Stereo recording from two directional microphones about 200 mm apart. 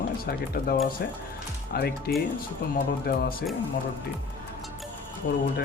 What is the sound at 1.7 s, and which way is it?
Speech, 50° left (ahead or behind).